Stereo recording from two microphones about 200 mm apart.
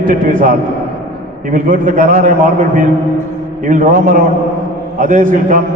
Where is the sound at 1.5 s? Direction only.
40° right (ahead or behind).